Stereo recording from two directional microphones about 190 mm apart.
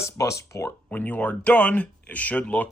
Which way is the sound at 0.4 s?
15° left (ahead or behind).